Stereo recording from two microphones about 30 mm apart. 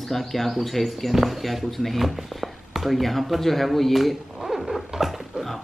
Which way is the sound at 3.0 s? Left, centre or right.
Centre.